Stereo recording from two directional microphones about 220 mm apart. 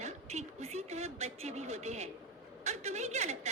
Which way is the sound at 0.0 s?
30° right (ahead or behind).